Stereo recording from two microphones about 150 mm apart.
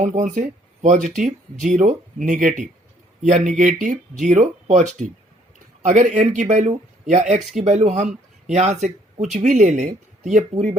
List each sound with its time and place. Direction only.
0.0 s speech: 60° right (ahead or behind)